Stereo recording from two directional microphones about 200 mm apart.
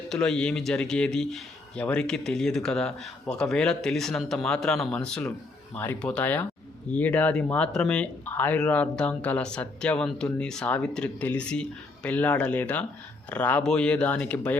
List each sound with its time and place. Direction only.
0.1 s speech: 5° left (ahead or behind)